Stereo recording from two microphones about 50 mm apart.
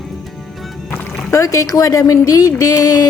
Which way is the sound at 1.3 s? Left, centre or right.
Left.